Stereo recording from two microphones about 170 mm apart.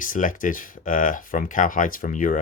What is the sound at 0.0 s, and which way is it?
Speech, 50° left (ahead or behind).